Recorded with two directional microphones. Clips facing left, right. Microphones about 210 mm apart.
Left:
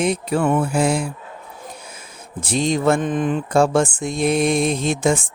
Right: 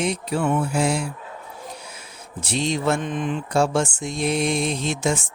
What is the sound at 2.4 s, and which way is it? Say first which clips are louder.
Speech: left 4 dB; 50° left (ahead or behind).